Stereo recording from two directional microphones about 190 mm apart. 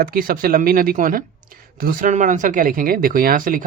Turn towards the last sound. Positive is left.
turn(degrees=-45)  # may be behind; listen again after turning